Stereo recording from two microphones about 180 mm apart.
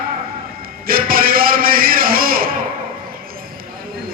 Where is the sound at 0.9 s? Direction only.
55° right (ahead or behind).